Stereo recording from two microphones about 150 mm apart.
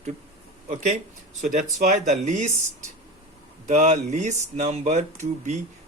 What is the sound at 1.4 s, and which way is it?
Speech, 55° right (ahead or behind).